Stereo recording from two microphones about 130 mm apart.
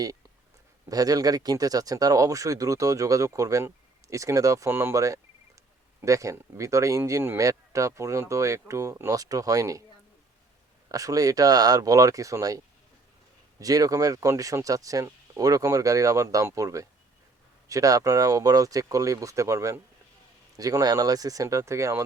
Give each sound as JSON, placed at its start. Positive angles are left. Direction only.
{"t": 0.9, "sound": "speech", "side_deg": -30}
{"t": 10.8, "sound": "speech", "side_deg": -25}